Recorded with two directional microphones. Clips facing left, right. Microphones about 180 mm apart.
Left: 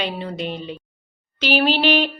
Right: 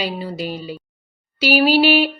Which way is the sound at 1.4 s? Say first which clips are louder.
Right 4 dB; 10° right (ahead or behind).